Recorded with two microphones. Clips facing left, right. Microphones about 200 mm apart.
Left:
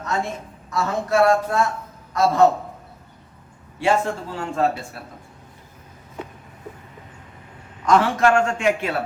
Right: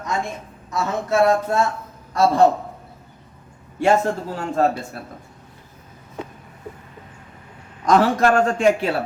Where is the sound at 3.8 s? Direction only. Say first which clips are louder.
Right 3 dB; 45° right (ahead or behind).